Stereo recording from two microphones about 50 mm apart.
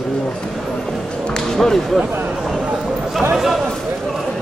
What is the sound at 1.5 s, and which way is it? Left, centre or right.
Speech, centre.